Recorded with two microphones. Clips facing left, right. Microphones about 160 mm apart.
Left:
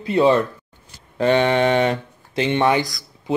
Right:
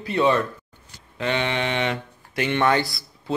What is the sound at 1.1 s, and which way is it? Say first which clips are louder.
Mantra: left 8 dB; 40° left (ahead or behind).